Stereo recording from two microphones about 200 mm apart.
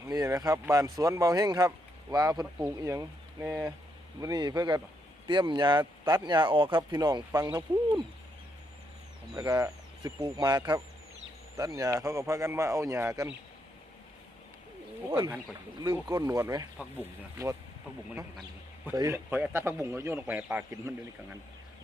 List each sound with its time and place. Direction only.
0.1 s speech: 15° right (ahead or behind)
9.3 s speech: 15° right (ahead or behind)
15.1 s speech: 20° right (ahead or behind)
18.9 s speech: 15° right (ahead or behind)